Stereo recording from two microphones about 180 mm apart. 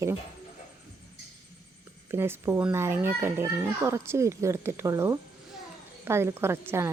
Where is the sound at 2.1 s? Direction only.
15° right (ahead or behind).